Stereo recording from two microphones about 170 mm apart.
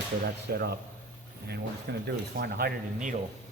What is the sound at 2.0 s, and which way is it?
A man's voice, 65° right (ahead or behind).